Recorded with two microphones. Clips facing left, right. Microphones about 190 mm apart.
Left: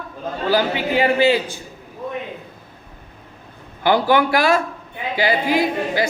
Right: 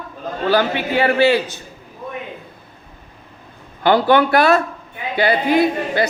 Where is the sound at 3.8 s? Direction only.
10° left (ahead or behind).